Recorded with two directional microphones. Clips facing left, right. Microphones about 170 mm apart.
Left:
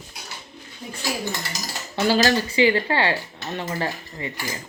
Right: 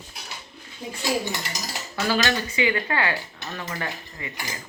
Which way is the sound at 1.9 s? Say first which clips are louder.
Left 5 dB; 30° left (ahead or behind).